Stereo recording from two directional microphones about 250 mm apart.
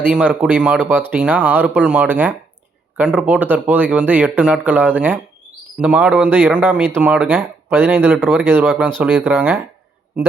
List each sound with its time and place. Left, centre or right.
0.0 s speech: centre